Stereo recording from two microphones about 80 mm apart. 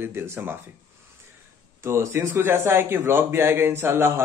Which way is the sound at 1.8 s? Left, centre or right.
Right.